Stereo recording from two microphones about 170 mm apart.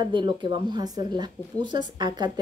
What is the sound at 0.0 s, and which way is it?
Speech, 25° right (ahead or behind).